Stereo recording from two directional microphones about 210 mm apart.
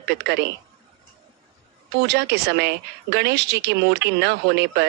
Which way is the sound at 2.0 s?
55° right (ahead or behind).